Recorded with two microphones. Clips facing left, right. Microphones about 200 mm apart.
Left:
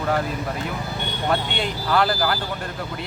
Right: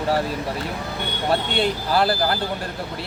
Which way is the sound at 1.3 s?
35° right (ahead or behind).